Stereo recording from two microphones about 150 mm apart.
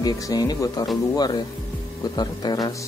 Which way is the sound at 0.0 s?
25° left (ahead or behind).